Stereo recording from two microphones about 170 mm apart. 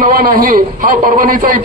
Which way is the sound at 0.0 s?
55° right (ahead or behind).